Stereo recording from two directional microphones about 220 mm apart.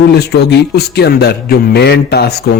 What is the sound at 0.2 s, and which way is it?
Speech, 50° left (ahead or behind).